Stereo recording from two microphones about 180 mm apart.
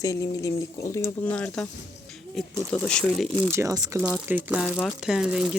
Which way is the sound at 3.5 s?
15° right (ahead or behind).